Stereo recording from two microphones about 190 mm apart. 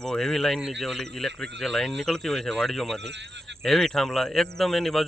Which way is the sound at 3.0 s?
65° right (ahead or behind).